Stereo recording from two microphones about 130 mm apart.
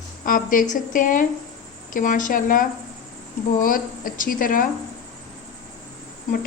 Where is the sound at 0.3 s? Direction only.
90° left.